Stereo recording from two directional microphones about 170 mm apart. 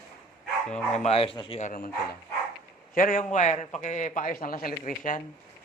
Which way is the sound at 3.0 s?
50° left (ahead or behind).